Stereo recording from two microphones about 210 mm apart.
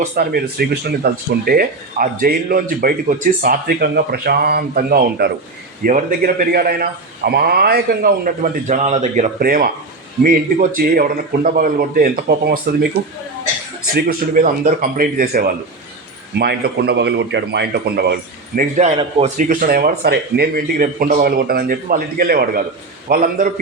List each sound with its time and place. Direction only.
0.2 s speech: 50° right (ahead or behind)
13.9 s speech: 45° right (ahead or behind)